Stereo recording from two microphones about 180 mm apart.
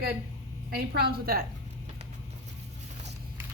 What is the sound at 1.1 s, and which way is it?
Speech, 55° right (ahead or behind).